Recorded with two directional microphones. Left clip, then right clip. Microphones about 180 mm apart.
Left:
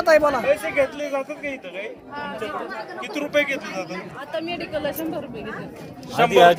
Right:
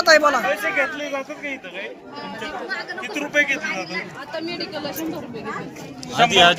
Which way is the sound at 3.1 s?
65° left (ahead or behind).